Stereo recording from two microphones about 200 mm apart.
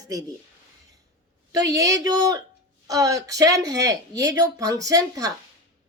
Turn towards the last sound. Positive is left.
turn(degrees=-15)  # may be behind; listen again after turning